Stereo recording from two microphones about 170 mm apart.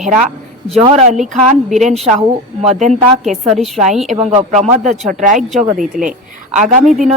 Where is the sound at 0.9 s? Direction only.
40° right (ahead or behind).